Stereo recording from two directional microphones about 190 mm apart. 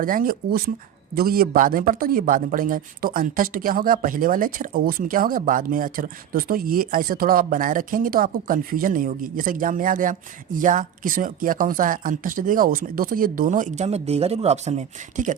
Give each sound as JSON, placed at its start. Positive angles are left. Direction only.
{"t": 0.0, "sound": "a man's voice", "side_deg": -45}